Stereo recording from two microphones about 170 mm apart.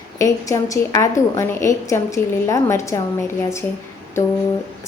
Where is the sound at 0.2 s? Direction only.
20° left (ahead or behind).